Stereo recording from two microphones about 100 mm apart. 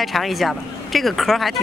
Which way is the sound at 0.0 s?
Centre (ahead or behind).